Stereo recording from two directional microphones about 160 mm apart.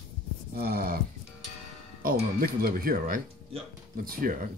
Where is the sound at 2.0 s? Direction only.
70° right (ahead or behind).